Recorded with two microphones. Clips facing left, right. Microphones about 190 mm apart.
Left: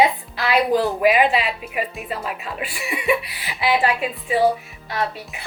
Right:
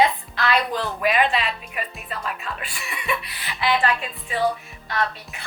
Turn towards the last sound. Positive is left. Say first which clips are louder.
# left 1 dB
turn(degrees=10)  # may be behind; listen again after turning